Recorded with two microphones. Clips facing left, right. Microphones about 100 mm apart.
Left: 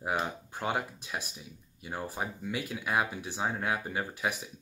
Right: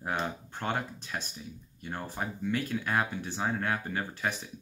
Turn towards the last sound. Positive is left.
turn(degrees=10)  # may be behind; listen again after turning